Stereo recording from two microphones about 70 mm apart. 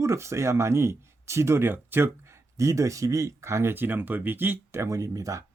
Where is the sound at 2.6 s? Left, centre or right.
Right.